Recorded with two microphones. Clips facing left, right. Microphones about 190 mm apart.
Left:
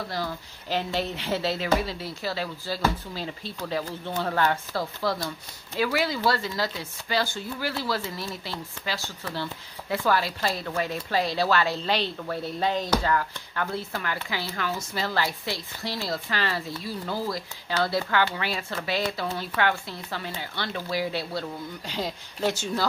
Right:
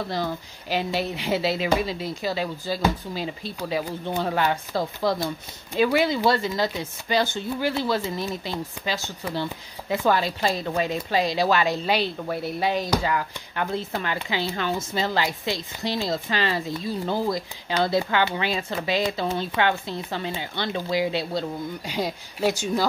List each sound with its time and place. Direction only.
0.1 s speech: 15° right (ahead or behind)